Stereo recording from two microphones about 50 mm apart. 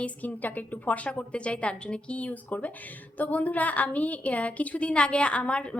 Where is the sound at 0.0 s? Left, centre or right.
Left.